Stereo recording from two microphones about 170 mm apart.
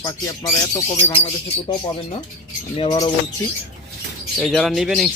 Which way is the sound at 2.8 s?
30° left (ahead or behind).